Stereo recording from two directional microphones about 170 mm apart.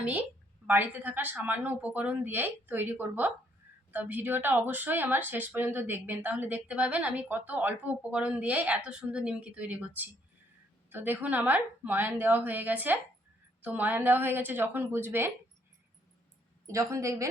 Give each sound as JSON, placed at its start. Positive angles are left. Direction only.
{"t": 0.7, "sound": "a woman's voice", "side_deg": -10}
{"t": 16.7, "sound": "a woman's voice", "side_deg": -20}